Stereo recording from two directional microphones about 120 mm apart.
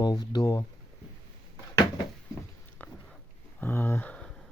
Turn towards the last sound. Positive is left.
turn(degrees=10)  # may be behind; listen again after turning